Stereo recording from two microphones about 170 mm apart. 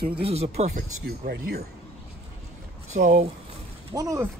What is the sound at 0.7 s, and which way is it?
Speech, 65° right (ahead or behind).